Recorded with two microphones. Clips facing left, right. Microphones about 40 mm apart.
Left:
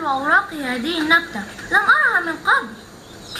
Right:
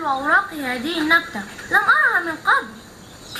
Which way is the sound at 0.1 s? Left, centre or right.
Centre.